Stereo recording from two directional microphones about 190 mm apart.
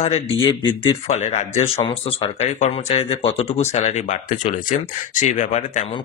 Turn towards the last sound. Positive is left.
turn(degrees=40)  # may be behind; listen again after turning